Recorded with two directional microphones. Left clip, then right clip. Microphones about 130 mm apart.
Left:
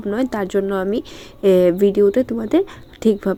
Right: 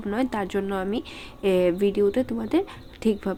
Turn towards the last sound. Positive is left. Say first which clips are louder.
# left 8 dB
turn(degrees=25)  # may be behind; listen again after turning